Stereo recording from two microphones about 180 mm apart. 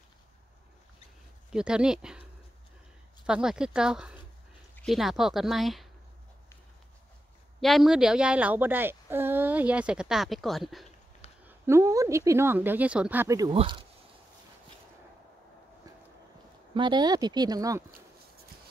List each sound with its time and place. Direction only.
1.5 s speech: 5° right (ahead or behind)
3.3 s speech: 5° right (ahead or behind)
7.6 s speech: centre (ahead or behind)
11.4 s a woman's voice: 15° right (ahead or behind)
13.6 s speech: 30° right (ahead or behind)
16.7 s speech: 25° right (ahead or behind)